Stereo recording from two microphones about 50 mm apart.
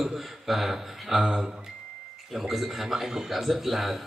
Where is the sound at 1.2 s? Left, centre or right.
Centre.